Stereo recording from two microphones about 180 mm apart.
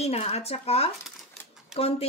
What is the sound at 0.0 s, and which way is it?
Speech, 35° left (ahead or behind).